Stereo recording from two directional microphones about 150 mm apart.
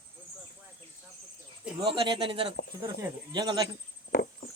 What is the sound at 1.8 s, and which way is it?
Speech, 35° right (ahead or behind).